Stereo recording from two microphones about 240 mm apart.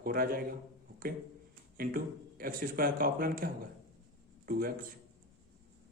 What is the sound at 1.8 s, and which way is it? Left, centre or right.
Speech, right.